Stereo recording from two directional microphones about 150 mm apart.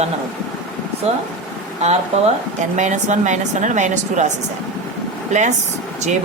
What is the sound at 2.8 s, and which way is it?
Speech, 55° right (ahead or behind).